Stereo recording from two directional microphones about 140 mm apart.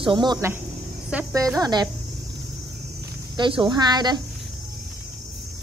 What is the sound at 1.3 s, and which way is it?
Speech, 25° right (ahead or behind).